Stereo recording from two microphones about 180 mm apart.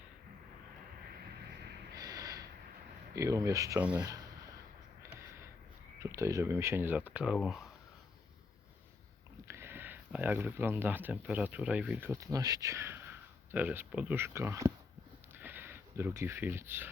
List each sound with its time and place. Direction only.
2.0 s snort: 20° right (ahead or behind)
3.2 s speech: 15° right (ahead or behind)
6.0 s speech: 15° right (ahead or behind); by 7.7 s centre (ahead or behind)
9.5 s speech: 15° right (ahead or behind)